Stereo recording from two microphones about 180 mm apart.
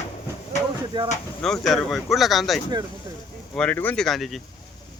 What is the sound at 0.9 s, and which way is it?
Speech, 25° right (ahead or behind).